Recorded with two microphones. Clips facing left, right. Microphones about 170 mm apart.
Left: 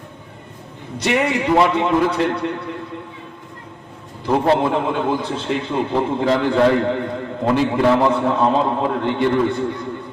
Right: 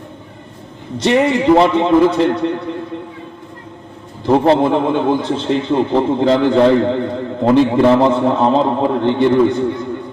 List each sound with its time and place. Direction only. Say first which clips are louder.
0.9 s a man's voice: right 5 dB; 25° right (ahead or behind)
4.3 s a man's voice: right 5 dB; 20° right (ahead or behind)